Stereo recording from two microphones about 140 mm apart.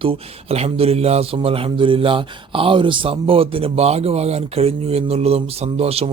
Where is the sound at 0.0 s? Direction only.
45° right (ahead or behind).